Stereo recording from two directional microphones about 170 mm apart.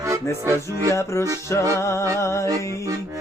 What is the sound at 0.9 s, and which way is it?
Music, 15° left (ahead or behind).